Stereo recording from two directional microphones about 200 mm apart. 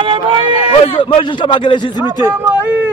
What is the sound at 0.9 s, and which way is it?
A man's voice, 25° left (ahead or behind).